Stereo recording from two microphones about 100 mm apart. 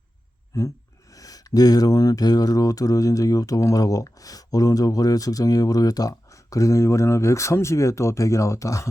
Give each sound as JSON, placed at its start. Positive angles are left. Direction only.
{"t": 0.5, "sound": "speech", "side_deg": 35}